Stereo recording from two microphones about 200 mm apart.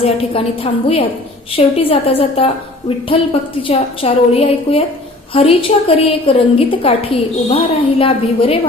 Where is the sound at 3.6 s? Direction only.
30° left (ahead or behind).